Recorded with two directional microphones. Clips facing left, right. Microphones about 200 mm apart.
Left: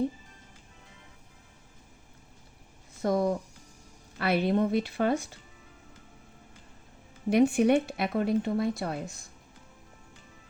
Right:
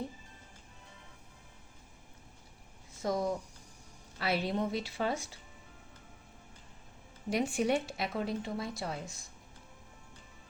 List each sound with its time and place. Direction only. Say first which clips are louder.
3.0 s speech: left 6 dB; 60° left (ahead or behind)
7.3 s speech: left 8 dB; 60° left (ahead or behind)